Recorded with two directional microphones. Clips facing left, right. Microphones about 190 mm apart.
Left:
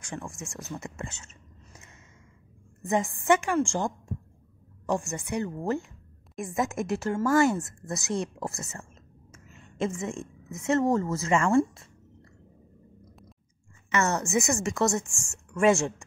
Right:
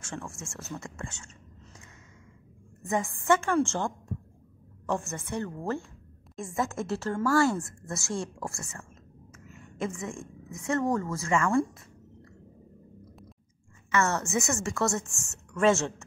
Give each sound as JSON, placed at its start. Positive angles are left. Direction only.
{"t": 0.0, "sound": "a woman's voice", "side_deg": 15}
{"t": 2.9, "sound": "a woman's voice", "side_deg": 20}
{"t": 13.9, "sound": "a woman's voice", "side_deg": 20}